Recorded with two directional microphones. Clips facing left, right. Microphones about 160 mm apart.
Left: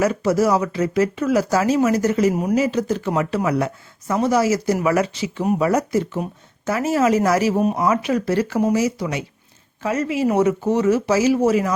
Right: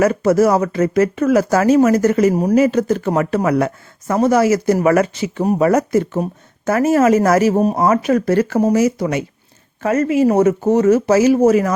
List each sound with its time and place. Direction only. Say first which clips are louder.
0.0 s speech: right 5 dB; 50° right (ahead or behind)
2.3 s speech: right 5 dB; 35° right (ahead or behind)
2.6 s speech: right 6 dB; 55° right (ahead or behind)